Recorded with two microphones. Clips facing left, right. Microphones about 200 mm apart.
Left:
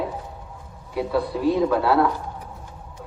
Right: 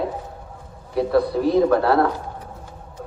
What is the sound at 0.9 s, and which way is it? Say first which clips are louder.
A man's voice: right 5 dB; 40° right (ahead or behind).